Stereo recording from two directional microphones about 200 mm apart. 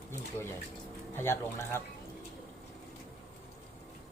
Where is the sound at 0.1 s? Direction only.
10° left (ahead or behind).